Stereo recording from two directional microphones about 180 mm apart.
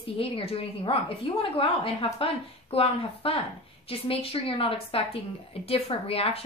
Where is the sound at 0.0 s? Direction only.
30° left (ahead or behind).